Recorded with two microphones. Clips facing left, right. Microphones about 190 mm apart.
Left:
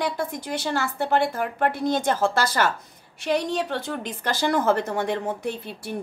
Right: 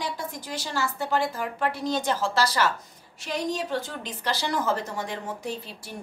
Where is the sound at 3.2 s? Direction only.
65° left (ahead or behind).